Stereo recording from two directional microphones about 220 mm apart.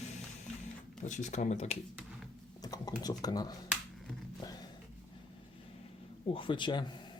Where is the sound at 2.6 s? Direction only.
15° left (ahead or behind).